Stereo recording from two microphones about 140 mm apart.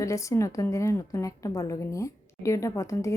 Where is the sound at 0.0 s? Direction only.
20° left (ahead or behind).